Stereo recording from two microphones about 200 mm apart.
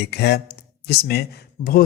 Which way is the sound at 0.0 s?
55° left (ahead or behind).